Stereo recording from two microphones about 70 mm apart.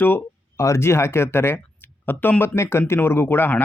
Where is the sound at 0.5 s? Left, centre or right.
Left.